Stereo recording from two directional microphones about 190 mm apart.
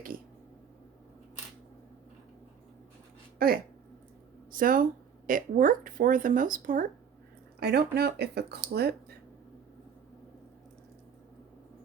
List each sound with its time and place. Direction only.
3.3 s speech: 50° right (ahead or behind)
7.6 s speech: 60° right (ahead or behind)